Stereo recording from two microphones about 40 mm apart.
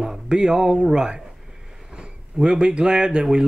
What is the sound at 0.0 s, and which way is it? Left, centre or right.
Speech, right.